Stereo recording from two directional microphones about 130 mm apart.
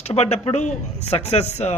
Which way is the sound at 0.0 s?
55° left (ahead or behind).